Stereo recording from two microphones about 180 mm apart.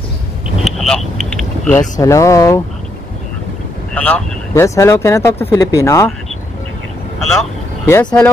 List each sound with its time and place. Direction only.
0.7 s vehicle: centre (ahead or behind)
1.8 s speech: 15° left (ahead or behind)
3.9 s speech: 10° left (ahead or behind)
7.8 s speech: 10° left (ahead or behind)